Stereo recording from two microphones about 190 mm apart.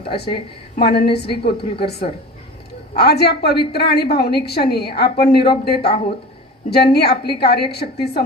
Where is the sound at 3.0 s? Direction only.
55° left (ahead or behind).